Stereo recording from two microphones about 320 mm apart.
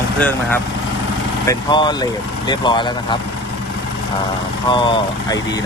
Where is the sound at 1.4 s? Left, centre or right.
Centre.